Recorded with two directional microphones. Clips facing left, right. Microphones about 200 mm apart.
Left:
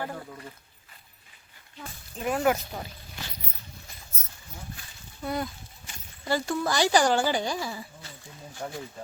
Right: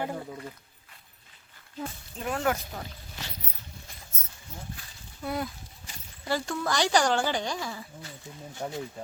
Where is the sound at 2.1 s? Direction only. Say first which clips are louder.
Left 4 dB; 10° left (ahead or behind).